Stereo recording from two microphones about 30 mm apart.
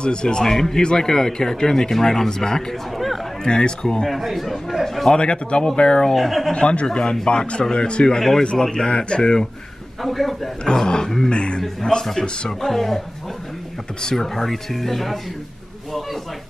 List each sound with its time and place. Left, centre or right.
0.0 s speech: left
3.8 s speech: centre
4.1 s speech: centre
4.8 s speech: centre
5.1 s speech: left
6.1 s speech: centre
6.5 s speech: left
10.0 s speech: centre
11.2 s speech: left
12.0 s speech: centre
14.1 s speech: centre